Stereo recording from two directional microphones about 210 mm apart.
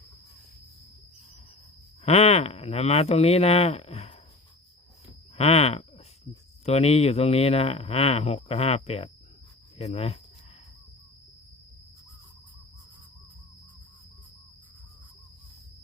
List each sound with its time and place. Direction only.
2.0 s speech: 30° left (ahead or behind)
5.4 s speech: 30° left (ahead or behind)